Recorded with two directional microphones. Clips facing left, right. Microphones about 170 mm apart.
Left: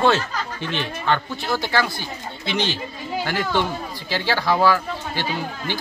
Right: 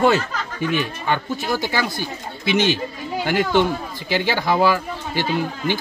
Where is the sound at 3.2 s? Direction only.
15° right (ahead or behind).